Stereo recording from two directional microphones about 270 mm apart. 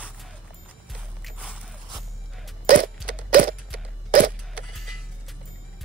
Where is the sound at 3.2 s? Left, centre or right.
Right.